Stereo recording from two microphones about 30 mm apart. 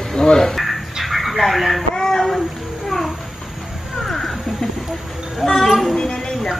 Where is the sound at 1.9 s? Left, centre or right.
Centre.